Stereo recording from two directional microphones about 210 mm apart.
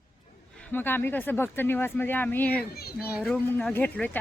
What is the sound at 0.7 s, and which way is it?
Speech, 10° left (ahead or behind).